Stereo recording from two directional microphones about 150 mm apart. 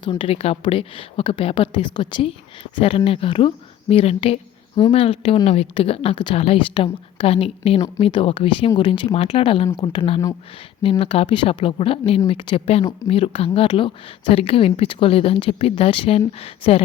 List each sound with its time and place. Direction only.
0.0 s speech: 35° left (ahead or behind)